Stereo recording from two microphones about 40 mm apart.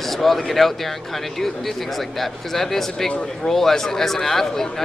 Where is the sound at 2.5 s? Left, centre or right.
Centre.